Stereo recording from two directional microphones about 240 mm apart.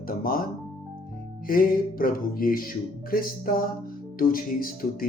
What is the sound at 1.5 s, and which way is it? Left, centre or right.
Speech, left.